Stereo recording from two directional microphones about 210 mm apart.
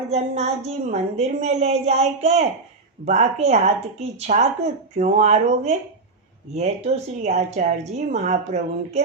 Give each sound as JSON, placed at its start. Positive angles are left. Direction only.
{"t": 0.1, "sound": "speech", "side_deg": -30}